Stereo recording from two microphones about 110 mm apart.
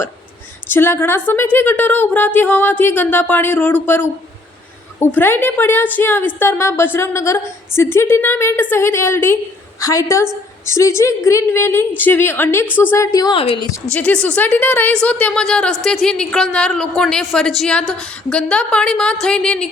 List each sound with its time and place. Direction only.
0.7 s speech: 20° left (ahead or behind)
13.3 s a woman's voice: 55° left (ahead or behind)
13.9 s a woman's voice: 10° left (ahead or behind)